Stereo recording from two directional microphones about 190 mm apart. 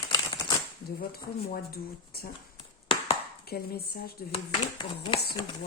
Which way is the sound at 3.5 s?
55° left (ahead or behind).